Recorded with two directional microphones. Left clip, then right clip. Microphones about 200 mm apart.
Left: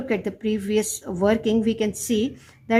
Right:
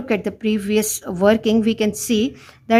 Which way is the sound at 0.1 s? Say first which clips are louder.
Right 5 dB; 30° right (ahead or behind).